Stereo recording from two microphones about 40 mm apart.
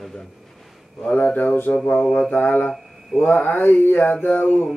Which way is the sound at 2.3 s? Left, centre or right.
Left.